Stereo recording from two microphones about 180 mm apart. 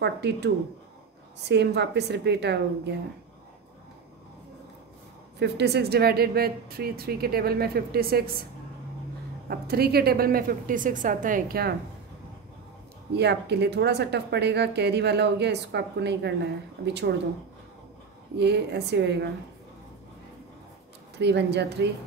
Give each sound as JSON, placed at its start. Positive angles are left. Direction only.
{"t": 0.0, "sound": "speech", "side_deg": -70}
{"t": 1.5, "sound": "speech", "side_deg": -70}
{"t": 5.4, "sound": "a woman's voice", "side_deg": -65}
{"t": 9.5, "sound": "a woman's voice", "side_deg": -60}
{"t": 13.1, "sound": "speech", "side_deg": -65}
{"t": 18.4, "sound": "speech", "side_deg": -70}
{"t": 21.2, "sound": "speech", "side_deg": -70}